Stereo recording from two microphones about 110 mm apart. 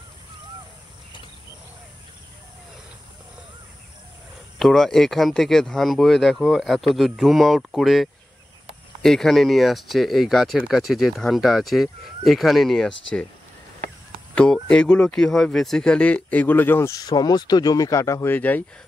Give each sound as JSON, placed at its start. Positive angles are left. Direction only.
{"t": 4.6, "sound": "speech", "side_deg": 5}
{"t": 14.3, "sound": "speech", "side_deg": 10}
{"t": 16.9, "sound": "speech", "side_deg": 35}
{"t": 18.3, "sound": "speech", "side_deg": 15}